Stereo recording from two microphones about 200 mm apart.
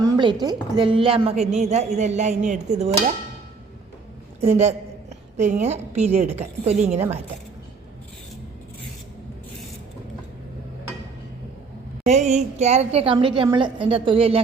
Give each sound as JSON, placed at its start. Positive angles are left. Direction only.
{"t": 0.0, "sound": "a woman's voice", "side_deg": -20}
{"t": 4.4, "sound": "a woman's voice", "side_deg": -35}
{"t": 12.0, "sound": "a woman's voice", "side_deg": -35}